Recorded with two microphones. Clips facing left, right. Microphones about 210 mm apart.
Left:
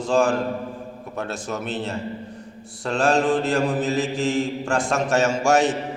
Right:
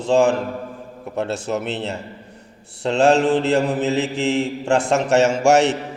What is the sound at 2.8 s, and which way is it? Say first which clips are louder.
A man's voice: right 5 dB; 25° right (ahead or behind).